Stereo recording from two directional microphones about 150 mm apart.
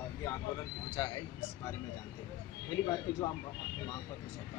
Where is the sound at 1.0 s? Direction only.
25° left (ahead or behind).